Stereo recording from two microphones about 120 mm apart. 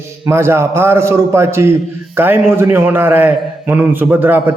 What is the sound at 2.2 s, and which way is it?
A man's voice, 20° right (ahead or behind).